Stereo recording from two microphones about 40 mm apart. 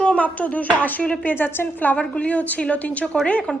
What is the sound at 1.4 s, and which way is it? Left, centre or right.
Speech, left.